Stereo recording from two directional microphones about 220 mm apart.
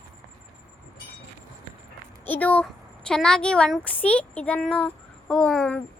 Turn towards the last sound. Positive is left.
turn(degrees=5)  # may be behind; listen again after turning